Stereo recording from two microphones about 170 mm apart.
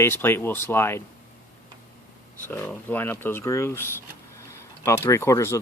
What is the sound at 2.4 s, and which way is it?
Speech, 10° left (ahead or behind).